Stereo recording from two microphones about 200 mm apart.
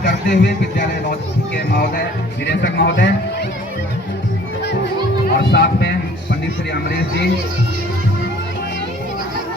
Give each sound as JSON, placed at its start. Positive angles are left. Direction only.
{"t": 0.0, "sound": "speech", "side_deg": 55}
{"t": 2.5, "sound": "speech", "side_deg": 60}
{"t": 5.3, "sound": "speech", "side_deg": 55}